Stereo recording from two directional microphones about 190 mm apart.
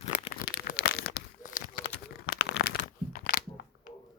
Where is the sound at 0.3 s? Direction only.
50° left (ahead or behind).